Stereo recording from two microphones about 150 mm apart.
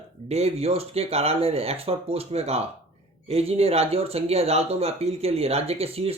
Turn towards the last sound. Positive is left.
turn(degrees=-40)  # may be behind; listen again after turning